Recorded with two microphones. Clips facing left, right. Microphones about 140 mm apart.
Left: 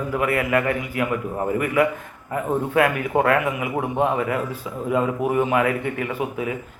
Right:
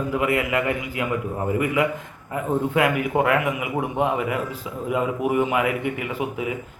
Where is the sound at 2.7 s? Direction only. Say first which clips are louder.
Left 3 dB; 20° right (ahead or behind).